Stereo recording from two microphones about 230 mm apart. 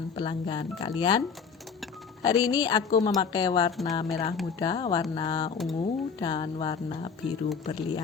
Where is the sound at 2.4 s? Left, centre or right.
Centre.